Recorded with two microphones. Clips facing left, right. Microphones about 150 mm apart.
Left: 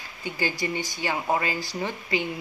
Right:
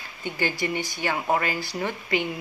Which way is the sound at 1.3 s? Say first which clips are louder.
Right 1 dB; 20° left (ahead or behind).